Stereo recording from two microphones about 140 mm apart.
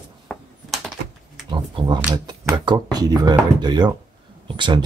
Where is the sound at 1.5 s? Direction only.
35° right (ahead or behind).